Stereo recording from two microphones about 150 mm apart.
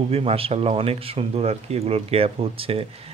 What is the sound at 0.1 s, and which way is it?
Speech, 40° right (ahead or behind).